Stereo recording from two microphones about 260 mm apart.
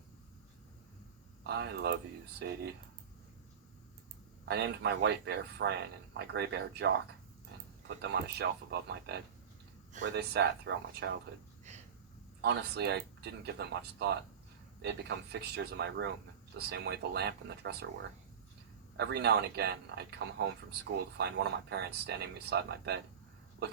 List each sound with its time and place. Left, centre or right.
1.5 s speech: right
4.4 s speech: right
11.7 s a sound: right
12.4 s speech: right
18.9 s speech: right